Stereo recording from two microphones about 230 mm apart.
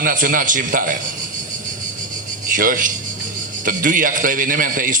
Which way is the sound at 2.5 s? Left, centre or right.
Right.